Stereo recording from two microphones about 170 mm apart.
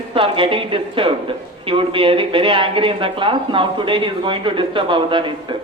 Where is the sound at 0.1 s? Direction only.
30° right (ahead or behind).